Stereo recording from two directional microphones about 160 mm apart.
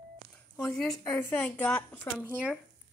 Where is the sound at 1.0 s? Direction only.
20° left (ahead or behind).